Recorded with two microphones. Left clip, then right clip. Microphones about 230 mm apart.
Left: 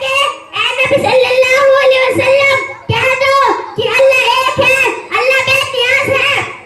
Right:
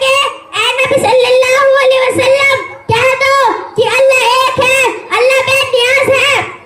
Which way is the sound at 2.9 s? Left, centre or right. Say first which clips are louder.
Right 1 dB; right.